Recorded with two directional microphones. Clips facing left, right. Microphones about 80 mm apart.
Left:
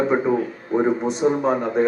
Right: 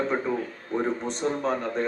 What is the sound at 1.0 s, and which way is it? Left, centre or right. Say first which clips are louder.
Speech: left 7 dB; centre.